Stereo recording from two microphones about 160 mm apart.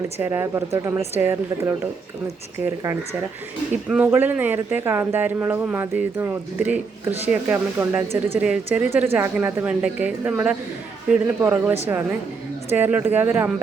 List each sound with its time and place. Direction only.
0.2 s speech: 15° right (ahead or behind)
3.8 s speech: 10° right (ahead or behind)
12.7 s speech: 10° right (ahead or behind)